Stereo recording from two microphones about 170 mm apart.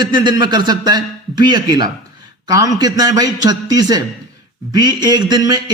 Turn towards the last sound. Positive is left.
turn(degrees=-25)  # may be behind; listen again after turning